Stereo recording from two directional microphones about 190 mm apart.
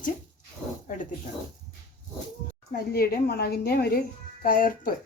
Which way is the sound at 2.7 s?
50° left (ahead or behind).